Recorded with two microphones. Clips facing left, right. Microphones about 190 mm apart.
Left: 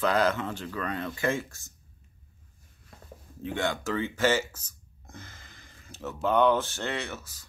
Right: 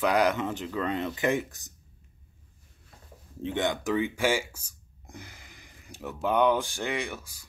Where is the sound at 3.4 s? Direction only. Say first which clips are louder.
Right 2 dB; 20° right (ahead or behind).